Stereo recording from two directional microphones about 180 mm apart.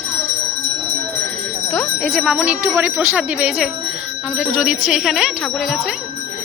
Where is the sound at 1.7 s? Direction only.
Centre (ahead or behind).